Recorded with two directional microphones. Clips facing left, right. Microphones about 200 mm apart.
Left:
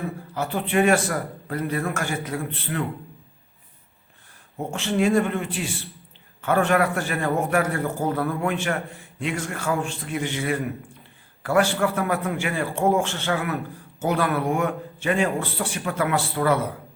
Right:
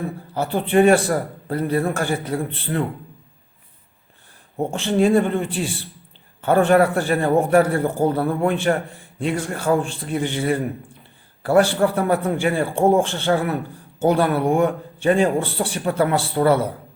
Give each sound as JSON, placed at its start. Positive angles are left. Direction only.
{"t": 0.3, "sound": "a man's voice", "side_deg": -30}
{"t": 4.5, "sound": "a man's voice", "side_deg": -30}